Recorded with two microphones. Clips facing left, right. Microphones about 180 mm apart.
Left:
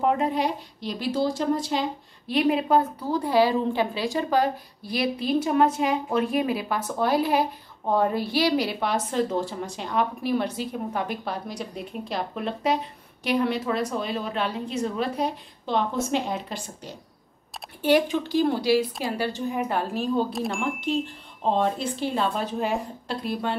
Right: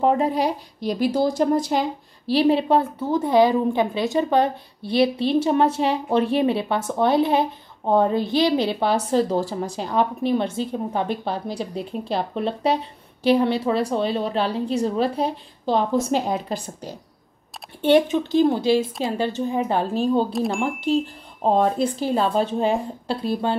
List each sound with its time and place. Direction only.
0.0 s a woman's voice: 35° right (ahead or behind)
2.2 s a woman's voice: 30° right (ahead or behind)
17.8 s a woman's voice: 25° right (ahead or behind)
20.3 s speech: centre (ahead or behind)
20.6 s a woman's voice: 35° right (ahead or behind)